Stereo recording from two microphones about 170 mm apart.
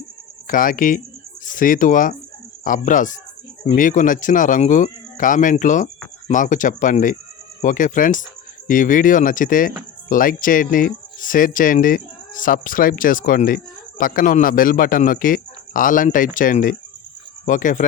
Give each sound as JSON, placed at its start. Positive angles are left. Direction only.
{"t": 0.4, "sound": "speech", "side_deg": 55}